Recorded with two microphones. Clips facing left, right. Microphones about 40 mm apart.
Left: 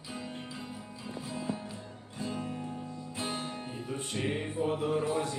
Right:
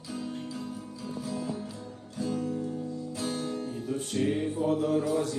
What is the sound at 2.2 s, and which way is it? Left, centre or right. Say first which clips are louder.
Speech: right 6 dB; left.